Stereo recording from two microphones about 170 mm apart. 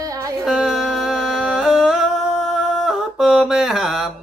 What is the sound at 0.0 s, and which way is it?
Music, 20° right (ahead or behind).